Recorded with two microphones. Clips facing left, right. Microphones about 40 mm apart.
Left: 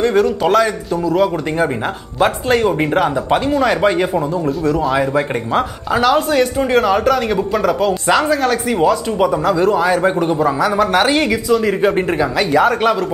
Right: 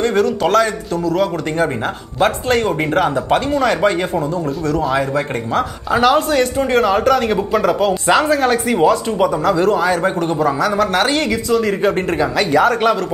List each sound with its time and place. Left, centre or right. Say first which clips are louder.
0.0 s speech: left 1 dB; centre